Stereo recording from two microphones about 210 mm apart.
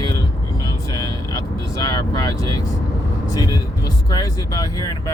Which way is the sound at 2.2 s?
15° left (ahead or behind).